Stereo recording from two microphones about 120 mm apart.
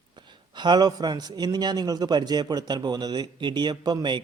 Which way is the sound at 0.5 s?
40° right (ahead or behind).